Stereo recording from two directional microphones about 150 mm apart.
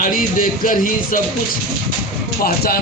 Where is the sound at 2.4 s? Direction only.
85° left.